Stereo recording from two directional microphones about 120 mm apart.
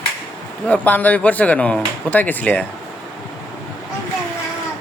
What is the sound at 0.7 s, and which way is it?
Speech, 15° left (ahead or behind).